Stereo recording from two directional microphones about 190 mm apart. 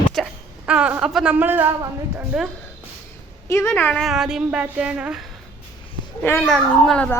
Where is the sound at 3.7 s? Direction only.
5° left (ahead or behind).